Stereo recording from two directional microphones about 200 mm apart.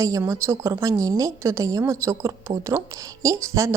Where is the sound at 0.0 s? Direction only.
15° right (ahead or behind).